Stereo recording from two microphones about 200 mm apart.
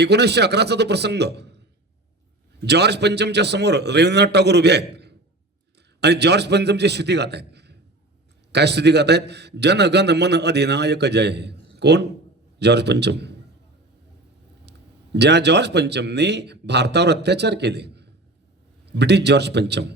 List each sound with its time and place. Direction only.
0.0 s a man's voice: 55° right (ahead or behind)
14.6 s a man's voice: 55° right (ahead or behind)